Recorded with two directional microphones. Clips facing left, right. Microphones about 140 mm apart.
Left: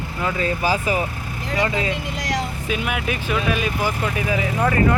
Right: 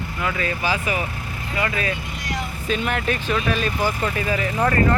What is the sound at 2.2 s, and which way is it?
Vehicle, 90° left.